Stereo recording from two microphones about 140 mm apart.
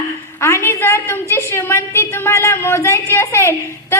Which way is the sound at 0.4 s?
20° left (ahead or behind).